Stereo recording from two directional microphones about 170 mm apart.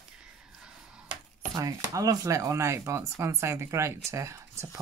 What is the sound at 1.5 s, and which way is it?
Speech, 20° right (ahead or behind).